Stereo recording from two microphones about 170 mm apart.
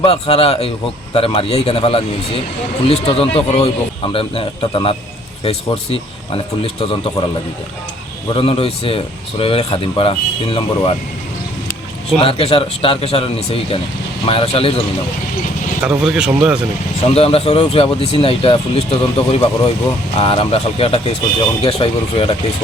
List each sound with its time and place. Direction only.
0.0 s speech: 35° left (ahead or behind)
8.3 s speech: 30° left (ahead or behind)
12.2 s speech: 35° left (ahead or behind)
15.8 s speech: 5° right (ahead or behind)
17.2 s speech: 35° left (ahead or behind)